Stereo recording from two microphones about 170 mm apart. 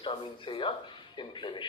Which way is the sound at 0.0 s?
30° left (ahead or behind).